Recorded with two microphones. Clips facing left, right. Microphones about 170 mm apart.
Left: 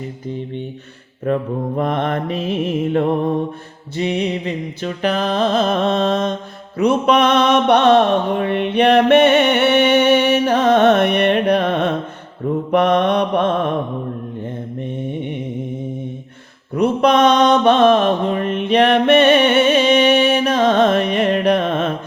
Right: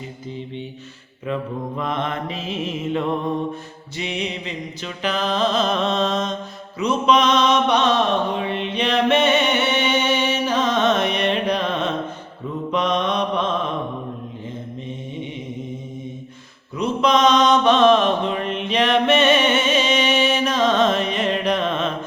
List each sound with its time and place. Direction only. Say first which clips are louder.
1.2 s mantra: left 6 dB; 50° left (ahead or behind)
3.9 s music: left 8 dB; 50° left (ahead or behind)
6.7 s mantra: left 4 dB; 60° left (ahead or behind)
14.8 s mantra: left 9 dB; 60° left (ahead or behind)
16.7 s mantra: left 5 dB; 60° left (ahead or behind)